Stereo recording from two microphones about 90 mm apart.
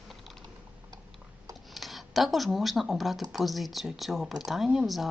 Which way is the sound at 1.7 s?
Centre (ahead or behind).